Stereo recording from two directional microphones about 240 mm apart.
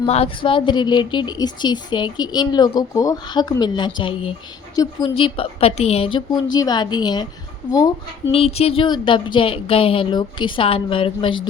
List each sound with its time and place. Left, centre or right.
0.0 s a woman's voice: left